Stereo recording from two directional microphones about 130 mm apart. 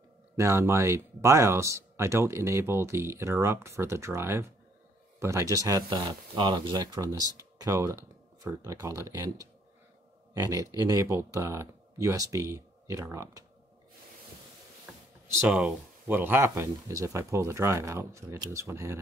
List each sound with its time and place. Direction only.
0.4 s speech: 20° right (ahead or behind)
7.0 s speech: 25° right (ahead or behind)
15.4 s speech: 5° right (ahead or behind)
16.1 s speech: 15° right (ahead or behind)